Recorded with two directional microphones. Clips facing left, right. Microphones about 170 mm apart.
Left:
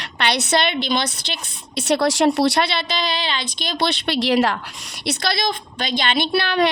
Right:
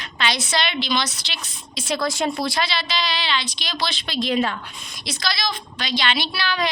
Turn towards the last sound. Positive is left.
turn(degrees=55)  # may be behind; listen again after turning